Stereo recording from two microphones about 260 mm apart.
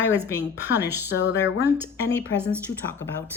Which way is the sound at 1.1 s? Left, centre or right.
Left.